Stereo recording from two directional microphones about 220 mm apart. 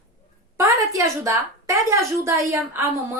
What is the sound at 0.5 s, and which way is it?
A woman's voice, 15° right (ahead or behind).